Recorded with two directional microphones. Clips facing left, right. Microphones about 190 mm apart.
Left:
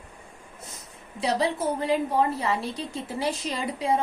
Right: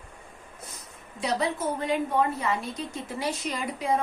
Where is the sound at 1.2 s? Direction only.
30° left (ahead or behind).